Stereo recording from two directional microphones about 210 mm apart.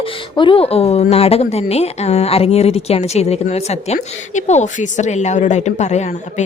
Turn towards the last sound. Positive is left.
turn(degrees=35)  # may be behind; listen again after turning